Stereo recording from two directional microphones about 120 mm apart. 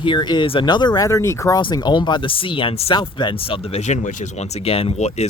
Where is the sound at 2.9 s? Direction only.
40° left (ahead or behind); by 5.3 s 65° left (ahead or behind).